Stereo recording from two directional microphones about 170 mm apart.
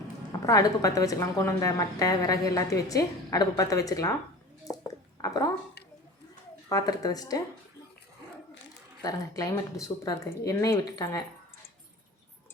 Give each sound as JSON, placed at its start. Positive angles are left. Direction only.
{"t": 0.4, "sound": "a woman's voice", "side_deg": 20}
{"t": 4.7, "sound": "a sound", "side_deg": 20}
{"t": 6.7, "sound": "a woman's voice", "side_deg": 20}
{"t": 9.0, "sound": "a woman's voice", "side_deg": 20}